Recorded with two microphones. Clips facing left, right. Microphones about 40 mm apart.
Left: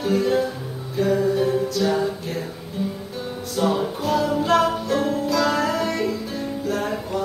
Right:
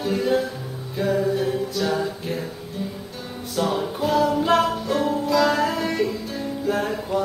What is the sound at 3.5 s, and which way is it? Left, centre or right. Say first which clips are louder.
Music: left 2 dB; centre.